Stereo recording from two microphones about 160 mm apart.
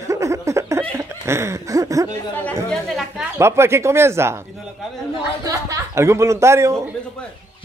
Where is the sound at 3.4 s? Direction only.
15° right (ahead or behind).